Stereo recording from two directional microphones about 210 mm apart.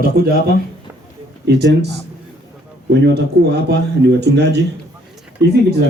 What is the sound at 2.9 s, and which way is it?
Speech, 50° right (ahead or behind).